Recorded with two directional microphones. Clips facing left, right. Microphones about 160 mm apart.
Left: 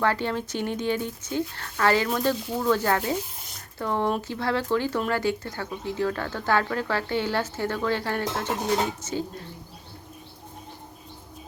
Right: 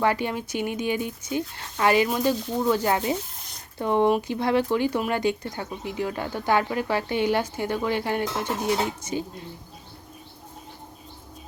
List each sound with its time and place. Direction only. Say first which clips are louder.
0.0 s speech: right 1 dB; 15° right (ahead or behind)